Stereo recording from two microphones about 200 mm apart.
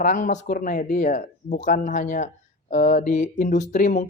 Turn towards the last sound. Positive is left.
turn(degrees=40)  # may be behind; listen again after turning